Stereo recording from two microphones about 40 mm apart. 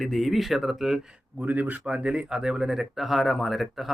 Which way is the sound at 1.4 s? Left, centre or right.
Right.